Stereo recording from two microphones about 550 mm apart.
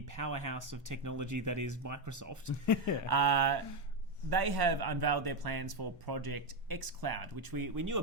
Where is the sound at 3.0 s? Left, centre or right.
Right.